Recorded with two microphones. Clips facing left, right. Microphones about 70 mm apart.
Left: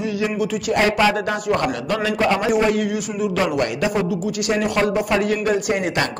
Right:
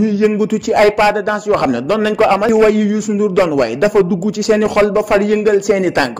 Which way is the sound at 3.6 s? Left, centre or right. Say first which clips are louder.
Right 9 dB; right.